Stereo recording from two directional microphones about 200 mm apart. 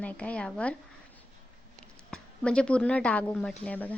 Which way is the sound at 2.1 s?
5° left (ahead or behind).